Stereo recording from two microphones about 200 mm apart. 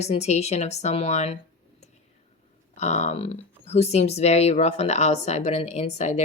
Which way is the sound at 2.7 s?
35° left (ahead or behind).